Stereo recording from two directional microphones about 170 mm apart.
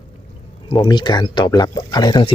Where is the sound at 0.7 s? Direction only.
25° left (ahead or behind).